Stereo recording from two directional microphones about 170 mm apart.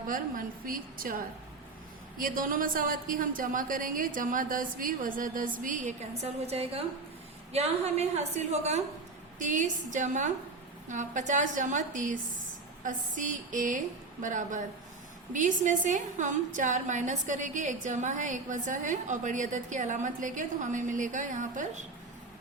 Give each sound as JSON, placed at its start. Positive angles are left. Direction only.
{"t": 0.1, "sound": "a woman's voice", "side_deg": -55}
{"t": 6.5, "sound": "a woman's voice", "side_deg": -35}